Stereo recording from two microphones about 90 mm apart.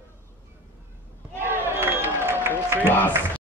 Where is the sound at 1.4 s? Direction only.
25° right (ahead or behind).